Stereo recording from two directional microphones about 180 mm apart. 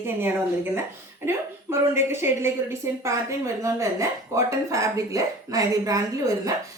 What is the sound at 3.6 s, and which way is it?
Speech, 15° right (ahead or behind).